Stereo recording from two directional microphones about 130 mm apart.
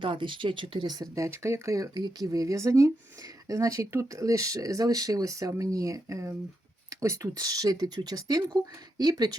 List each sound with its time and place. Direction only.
0.0 s speech: 40° right (ahead or behind)